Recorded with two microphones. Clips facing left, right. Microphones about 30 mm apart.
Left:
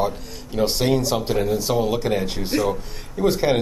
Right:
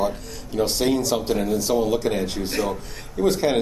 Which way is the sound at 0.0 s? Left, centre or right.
Centre.